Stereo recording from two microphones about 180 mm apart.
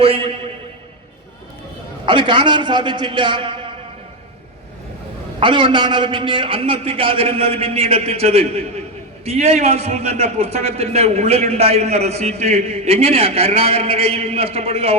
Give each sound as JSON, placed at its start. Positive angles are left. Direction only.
{"t": 0.0, "sound": "a man's voice", "side_deg": -30}
{"t": 2.0, "sound": "a man's voice", "side_deg": -25}
{"t": 5.4, "sound": "a man's voice", "side_deg": -25}